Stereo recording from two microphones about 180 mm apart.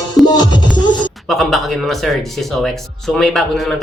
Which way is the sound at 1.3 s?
Centre (ahead or behind).